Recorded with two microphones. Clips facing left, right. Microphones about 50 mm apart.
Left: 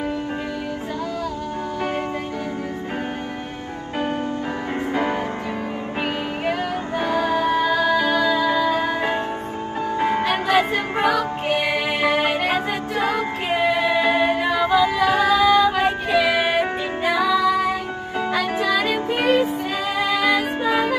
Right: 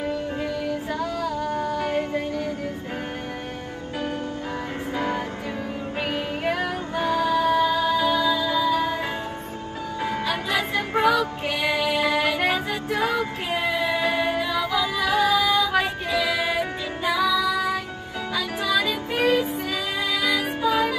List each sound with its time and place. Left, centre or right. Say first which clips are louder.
4.9 s music: left 3 dB; centre
7.0 s music: left 1 dB; centre
7.6 s music: left 2 dB; left
10.2 s music: left 6 dB; left
15.1 s female singing: left 3 dB; left
16.1 s music: left 5 dB; left
19.1 s music: left 1 dB; left